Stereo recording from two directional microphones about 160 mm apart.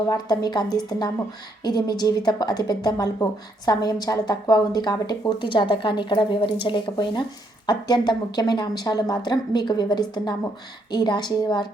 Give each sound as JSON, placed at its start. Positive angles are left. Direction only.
{"t": 0.1, "sound": "a woman's voice", "side_deg": 25}